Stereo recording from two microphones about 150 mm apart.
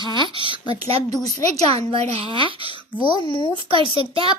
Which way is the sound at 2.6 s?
35° left (ahead or behind).